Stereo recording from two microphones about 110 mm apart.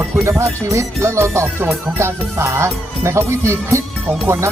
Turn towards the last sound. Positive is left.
turn(degrees=-20)  # may be behind; listen again after turning